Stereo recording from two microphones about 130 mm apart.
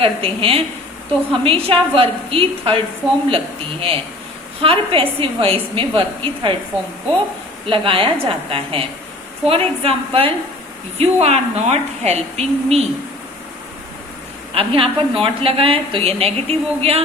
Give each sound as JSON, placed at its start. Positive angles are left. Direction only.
{"t": 0.0, "sound": "a woman's voice", "side_deg": -45}
{"t": 7.7, "sound": "a woman's voice", "side_deg": -45}
{"t": 14.5, "sound": "a woman's voice", "side_deg": -45}